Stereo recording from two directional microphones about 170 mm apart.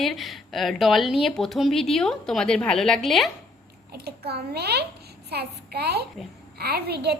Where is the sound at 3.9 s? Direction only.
70° right (ahead or behind).